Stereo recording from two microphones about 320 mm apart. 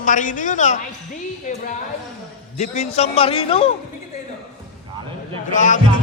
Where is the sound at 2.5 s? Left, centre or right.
Left.